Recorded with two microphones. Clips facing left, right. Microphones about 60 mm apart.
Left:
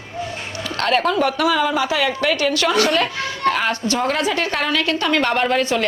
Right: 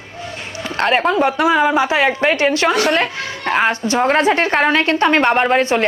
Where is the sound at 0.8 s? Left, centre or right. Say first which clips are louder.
Right 3 dB; right.